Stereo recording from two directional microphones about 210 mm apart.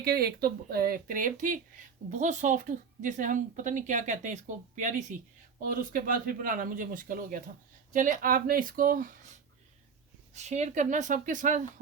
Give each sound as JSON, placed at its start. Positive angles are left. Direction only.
{"t": 0.0, "sound": "a woman's voice", "side_deg": -45}